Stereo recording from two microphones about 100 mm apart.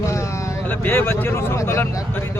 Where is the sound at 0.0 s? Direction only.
30° left (ahead or behind).